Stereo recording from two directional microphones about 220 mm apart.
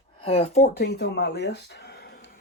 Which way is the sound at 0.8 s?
50° left (ahead or behind).